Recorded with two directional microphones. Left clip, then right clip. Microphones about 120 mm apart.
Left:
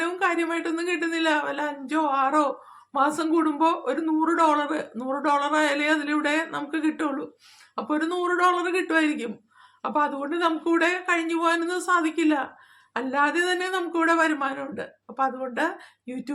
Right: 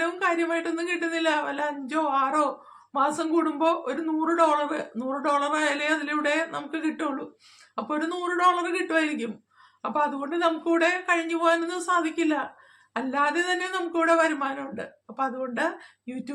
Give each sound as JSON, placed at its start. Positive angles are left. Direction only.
{"t": 0.0, "sound": "speech", "side_deg": 35}